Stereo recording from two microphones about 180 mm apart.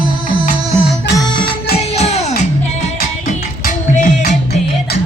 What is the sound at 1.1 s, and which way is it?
Music, 25° left (ahead or behind).